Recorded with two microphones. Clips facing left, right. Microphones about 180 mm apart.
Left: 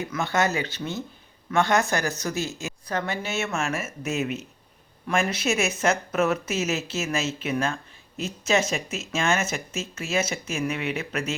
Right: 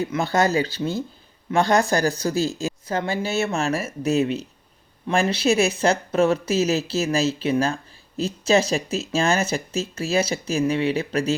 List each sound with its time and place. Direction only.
0.1 s speech: 35° right (ahead or behind)